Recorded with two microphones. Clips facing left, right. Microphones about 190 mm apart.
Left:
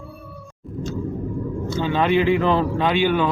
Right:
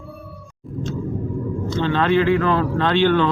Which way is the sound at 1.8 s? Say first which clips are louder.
Right 1 dB; 10° left (ahead or behind).